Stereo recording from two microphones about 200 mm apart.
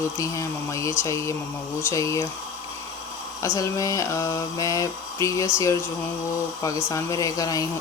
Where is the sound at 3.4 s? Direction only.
15° left (ahead or behind).